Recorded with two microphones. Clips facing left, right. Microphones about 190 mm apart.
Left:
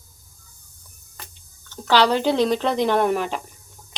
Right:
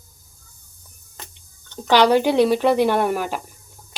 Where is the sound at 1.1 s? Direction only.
20° right (ahead or behind).